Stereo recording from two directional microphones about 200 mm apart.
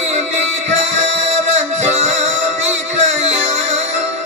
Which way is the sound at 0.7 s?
35° right (ahead or behind).